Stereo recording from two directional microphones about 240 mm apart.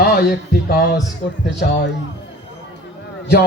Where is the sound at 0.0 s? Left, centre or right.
Left.